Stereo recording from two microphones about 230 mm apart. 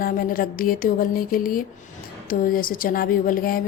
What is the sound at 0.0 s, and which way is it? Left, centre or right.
Speech, left.